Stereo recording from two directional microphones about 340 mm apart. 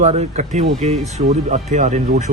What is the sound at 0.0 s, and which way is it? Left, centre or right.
Speech, centre.